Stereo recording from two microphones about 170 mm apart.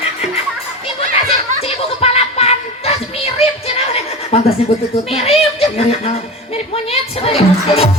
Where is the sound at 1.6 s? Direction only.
35° left (ahead or behind).